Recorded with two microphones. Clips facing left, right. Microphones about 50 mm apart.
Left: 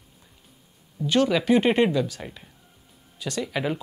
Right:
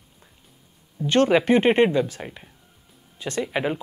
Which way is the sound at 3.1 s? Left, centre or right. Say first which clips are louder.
Right 2 dB; right.